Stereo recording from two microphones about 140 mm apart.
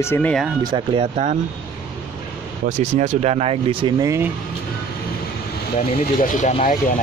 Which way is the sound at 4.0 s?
20° right (ahead or behind).